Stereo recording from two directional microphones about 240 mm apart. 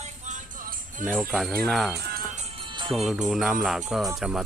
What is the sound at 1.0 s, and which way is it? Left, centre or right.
Speech, centre.